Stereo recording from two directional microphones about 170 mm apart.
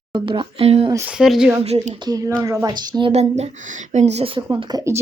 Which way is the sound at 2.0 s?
20° right (ahead or behind).